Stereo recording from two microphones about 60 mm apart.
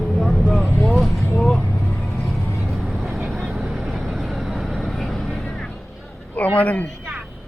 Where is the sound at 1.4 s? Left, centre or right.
Centre.